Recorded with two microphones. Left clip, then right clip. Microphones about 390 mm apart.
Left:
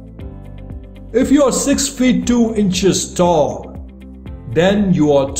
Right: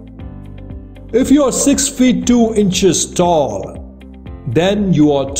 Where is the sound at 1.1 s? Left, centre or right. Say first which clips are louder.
Right 1 dB; centre.